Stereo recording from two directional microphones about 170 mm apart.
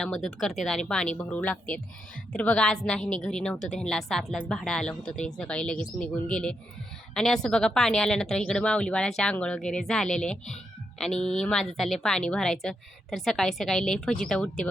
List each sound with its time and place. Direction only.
0.0 s speech: 5° left (ahead or behind)